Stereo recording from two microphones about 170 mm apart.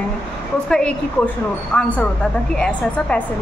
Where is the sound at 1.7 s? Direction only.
5° left (ahead or behind).